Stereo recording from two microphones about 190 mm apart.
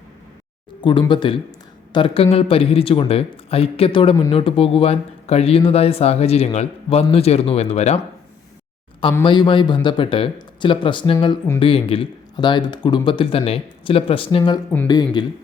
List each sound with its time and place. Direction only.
0.8 s speech: 25° left (ahead or behind)
9.2 s speech: 25° left (ahead or behind)